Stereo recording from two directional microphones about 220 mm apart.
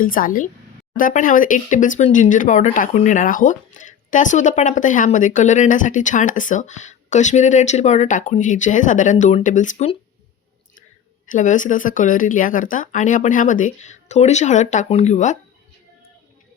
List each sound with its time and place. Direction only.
0.0 s speech: 40° left (ahead or behind)
11.3 s speech: 35° left (ahead or behind)